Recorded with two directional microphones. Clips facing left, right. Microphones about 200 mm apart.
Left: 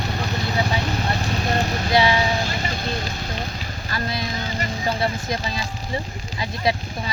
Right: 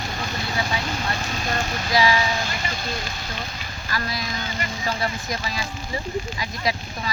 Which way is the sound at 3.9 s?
25° left (ahead or behind).